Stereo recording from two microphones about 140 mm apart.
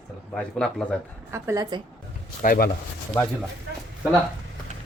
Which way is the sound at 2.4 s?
90° left.